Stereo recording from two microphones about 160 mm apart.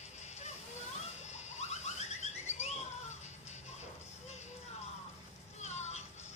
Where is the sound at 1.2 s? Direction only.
45° left (ahead or behind).